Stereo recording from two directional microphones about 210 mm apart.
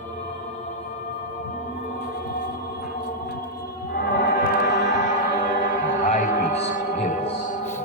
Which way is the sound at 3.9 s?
50° left (ahead or behind).